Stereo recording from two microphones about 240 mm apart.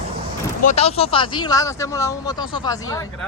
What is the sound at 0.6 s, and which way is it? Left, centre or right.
Speech, left.